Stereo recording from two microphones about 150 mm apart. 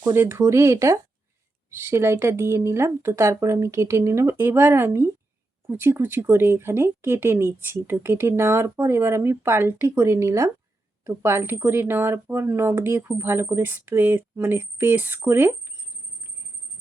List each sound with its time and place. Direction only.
0.0 s speech: 15° right (ahead or behind)